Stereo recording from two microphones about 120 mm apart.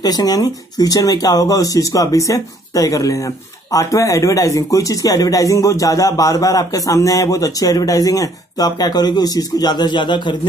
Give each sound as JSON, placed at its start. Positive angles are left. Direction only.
{"t": 0.0, "sound": "speech", "side_deg": 35}